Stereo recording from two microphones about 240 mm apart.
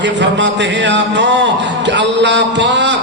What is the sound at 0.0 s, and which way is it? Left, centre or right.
A man's voice, right.